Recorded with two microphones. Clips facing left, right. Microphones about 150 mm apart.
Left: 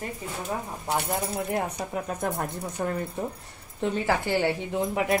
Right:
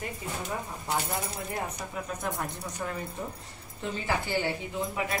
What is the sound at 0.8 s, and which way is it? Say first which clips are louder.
Speech: left 4 dB; 65° left (ahead or behind).